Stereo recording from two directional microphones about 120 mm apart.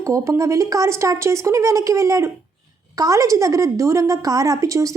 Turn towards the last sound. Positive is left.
turn(degrees=-25)  # may be behind; listen again after turning